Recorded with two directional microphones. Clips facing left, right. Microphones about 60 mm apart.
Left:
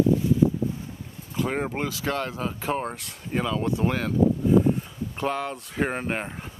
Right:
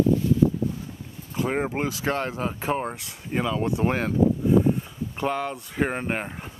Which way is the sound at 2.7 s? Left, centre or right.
Centre.